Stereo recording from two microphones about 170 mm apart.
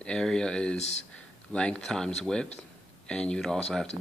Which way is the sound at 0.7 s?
40° left (ahead or behind).